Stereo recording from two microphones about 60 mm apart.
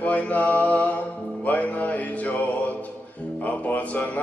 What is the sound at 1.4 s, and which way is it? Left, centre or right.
Mantra, left.